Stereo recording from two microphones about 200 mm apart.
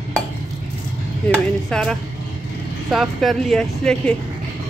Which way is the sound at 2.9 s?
Centre (ahead or behind).